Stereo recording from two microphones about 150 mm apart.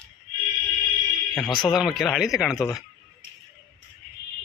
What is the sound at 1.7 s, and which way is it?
Speech, centre (ahead or behind).